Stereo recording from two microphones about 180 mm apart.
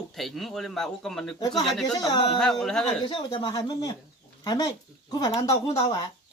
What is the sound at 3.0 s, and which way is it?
Speech, 25° left (ahead or behind).